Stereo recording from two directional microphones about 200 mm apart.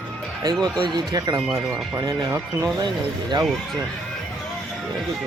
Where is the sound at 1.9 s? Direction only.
15° right (ahead or behind).